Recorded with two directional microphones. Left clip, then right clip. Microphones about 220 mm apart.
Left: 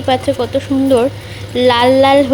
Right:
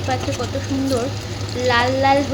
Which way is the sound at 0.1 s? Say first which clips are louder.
Left 6 dB; 40° left (ahead or behind).